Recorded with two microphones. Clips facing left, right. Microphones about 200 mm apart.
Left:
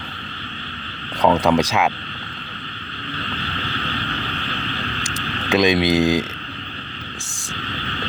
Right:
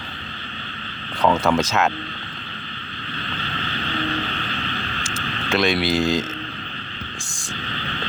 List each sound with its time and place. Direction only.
1.2 s speech: 15° left (ahead or behind)
5.1 s speech: 15° left (ahead or behind)